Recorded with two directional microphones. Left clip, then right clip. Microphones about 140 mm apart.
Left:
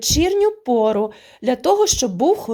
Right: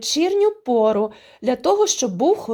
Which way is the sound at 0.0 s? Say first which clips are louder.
Left 1 dB; 10° left (ahead or behind).